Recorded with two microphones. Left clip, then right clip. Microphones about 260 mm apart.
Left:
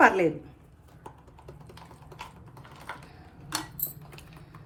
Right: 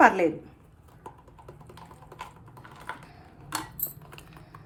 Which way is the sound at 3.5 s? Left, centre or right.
Centre.